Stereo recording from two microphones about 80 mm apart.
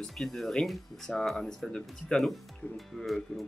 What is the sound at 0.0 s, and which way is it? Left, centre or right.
Speech, centre.